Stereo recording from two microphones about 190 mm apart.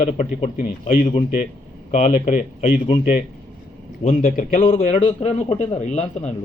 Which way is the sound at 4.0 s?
35° left (ahead or behind).